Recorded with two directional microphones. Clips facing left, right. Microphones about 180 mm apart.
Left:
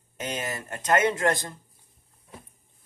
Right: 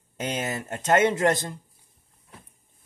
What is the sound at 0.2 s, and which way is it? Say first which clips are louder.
Speech: right 3 dB; 25° right (ahead or behind).